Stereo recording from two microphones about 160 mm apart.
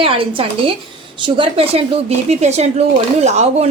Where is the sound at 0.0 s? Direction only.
35° right (ahead or behind).